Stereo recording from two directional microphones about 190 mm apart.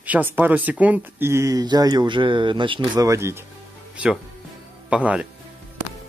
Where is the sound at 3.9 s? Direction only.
5° right (ahead or behind).